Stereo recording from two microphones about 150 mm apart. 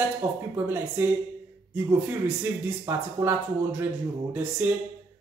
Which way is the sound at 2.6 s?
15° right (ahead or behind).